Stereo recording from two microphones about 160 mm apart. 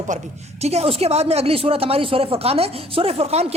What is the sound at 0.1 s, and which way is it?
A man's voice, 50° right (ahead or behind).